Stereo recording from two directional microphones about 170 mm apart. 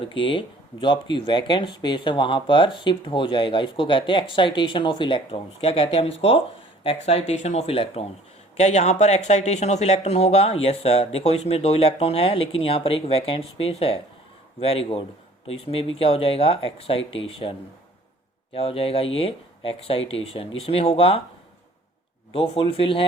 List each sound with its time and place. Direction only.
0.0 s speech: 30° left (ahead or behind)
18.5 s speech: 35° left (ahead or behind)
22.3 s speech: 30° left (ahead or behind)